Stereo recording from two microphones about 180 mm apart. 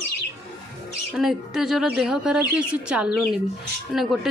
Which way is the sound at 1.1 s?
Centre (ahead or behind).